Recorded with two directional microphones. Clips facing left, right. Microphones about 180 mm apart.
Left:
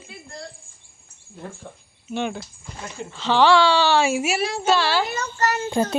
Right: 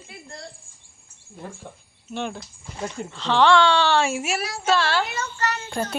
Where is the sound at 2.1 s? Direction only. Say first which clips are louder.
Left 3 dB; centre (ahead or behind).